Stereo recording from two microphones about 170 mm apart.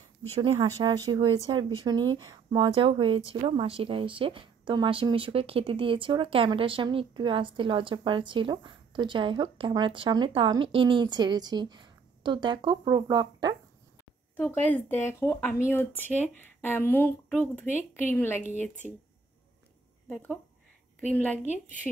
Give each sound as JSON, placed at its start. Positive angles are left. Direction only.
{"t": 0.4, "sound": "a woman's voice", "side_deg": -25}
{"t": 14.3, "sound": "speech", "side_deg": 10}
{"t": 20.1, "sound": "a woman's voice", "side_deg": 0}